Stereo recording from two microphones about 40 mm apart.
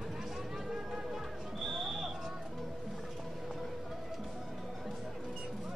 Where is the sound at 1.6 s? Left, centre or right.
Centre.